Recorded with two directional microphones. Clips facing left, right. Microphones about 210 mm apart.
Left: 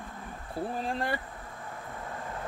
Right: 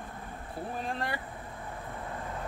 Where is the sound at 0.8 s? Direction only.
30° left (ahead or behind).